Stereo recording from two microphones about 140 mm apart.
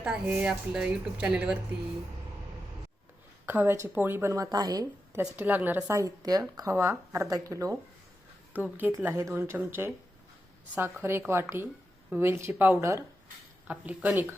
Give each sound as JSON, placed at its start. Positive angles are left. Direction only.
{"t": 0.0, "sound": "a woman's voice", "side_deg": -10}
{"t": 3.4, "sound": "a woman's voice", "side_deg": -15}
{"t": 5.2, "sound": "a woman's voice", "side_deg": -10}
{"t": 8.8, "sound": "a woman's voice", "side_deg": -15}
{"t": 11.0, "sound": "a woman's voice", "side_deg": -20}
{"t": 13.7, "sound": "a woman's voice", "side_deg": -10}